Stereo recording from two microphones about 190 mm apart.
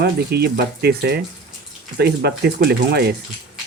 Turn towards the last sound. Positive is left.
turn(degrees=-55)  # may be behind; listen again after turning